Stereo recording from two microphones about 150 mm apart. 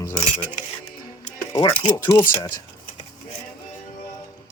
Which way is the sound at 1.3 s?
20° left (ahead or behind).